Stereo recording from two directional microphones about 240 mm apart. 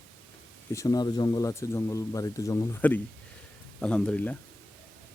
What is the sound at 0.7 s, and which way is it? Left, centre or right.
Speech, centre.